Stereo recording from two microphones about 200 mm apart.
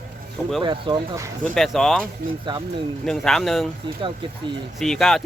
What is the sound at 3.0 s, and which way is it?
Speech, centre (ahead or behind).